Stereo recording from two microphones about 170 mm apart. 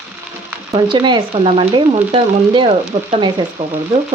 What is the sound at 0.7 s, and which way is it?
Speech, 25° right (ahead or behind).